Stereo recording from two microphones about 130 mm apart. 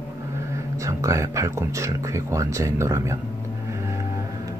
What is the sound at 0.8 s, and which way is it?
A man's voice, 25° right (ahead or behind).